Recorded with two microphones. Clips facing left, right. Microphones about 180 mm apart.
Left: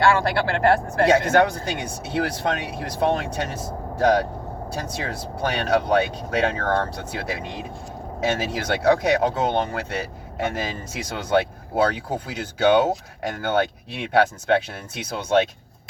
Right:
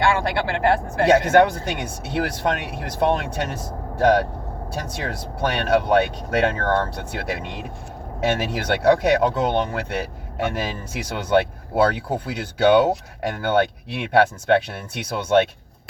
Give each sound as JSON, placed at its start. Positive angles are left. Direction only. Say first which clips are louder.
{"t": 0.1, "sound": "speech", "louder": "left 1 dB", "side_deg": -20}
{"t": 1.0, "sound": "speech", "louder": "right 3 dB", "side_deg": -60}